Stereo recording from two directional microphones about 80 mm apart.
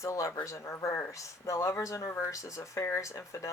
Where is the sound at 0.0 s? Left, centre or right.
Left.